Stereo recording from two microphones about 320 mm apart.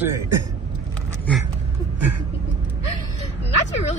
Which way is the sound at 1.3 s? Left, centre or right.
Centre.